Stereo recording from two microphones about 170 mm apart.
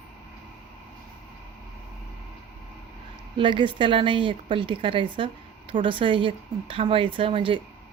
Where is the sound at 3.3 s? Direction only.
30° right (ahead or behind).